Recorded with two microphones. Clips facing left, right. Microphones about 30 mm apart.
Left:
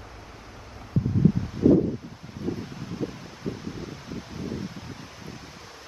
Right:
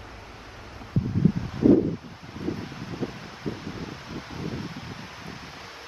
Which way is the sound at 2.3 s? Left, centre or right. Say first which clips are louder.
Even; centre.